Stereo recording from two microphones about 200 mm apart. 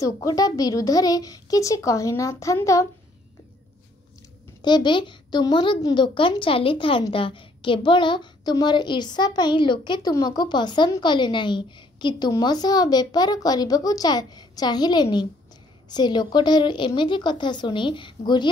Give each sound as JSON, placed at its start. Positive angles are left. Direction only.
{"t": 0.0, "sound": "speech", "side_deg": 15}
{"t": 4.6, "sound": "a woman's voice", "side_deg": 20}